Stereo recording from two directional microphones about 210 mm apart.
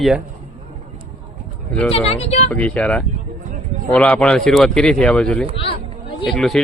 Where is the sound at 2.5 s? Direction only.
5° left (ahead or behind).